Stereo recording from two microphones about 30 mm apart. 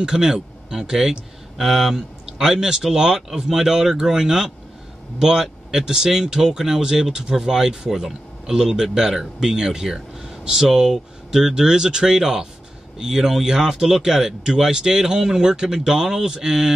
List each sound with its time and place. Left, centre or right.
0.0 s speech: right; by 2.0 s centre
2.0 s speech: centre